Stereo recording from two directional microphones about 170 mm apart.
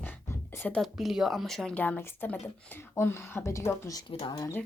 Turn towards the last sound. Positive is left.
turn(degrees=20)  # may be behind; listen again after turning